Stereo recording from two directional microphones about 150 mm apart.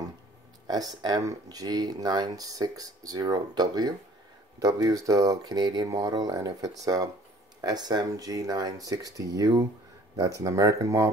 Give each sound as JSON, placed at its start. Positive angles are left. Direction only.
{"t": 0.7, "sound": "speech", "side_deg": -25}